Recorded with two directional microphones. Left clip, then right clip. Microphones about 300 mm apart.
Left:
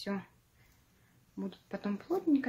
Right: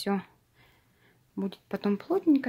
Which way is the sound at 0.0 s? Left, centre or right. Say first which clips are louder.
Right 8 dB; right.